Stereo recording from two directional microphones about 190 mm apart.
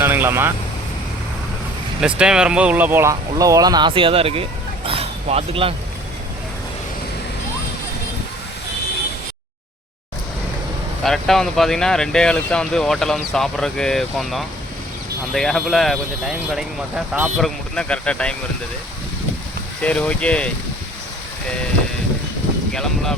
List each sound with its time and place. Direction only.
0.0 s vehicle: 10° right (ahead or behind)
2.0 s speech: 5° right (ahead or behind); by 4.4 s 30° right (ahead or behind)
4.9 s a sound: 30° right (ahead or behind)
11.0 s speech: centre (ahead or behind)
19.8 s speech: 5° left (ahead or behind)
22.7 s speech: 5° left (ahead or behind)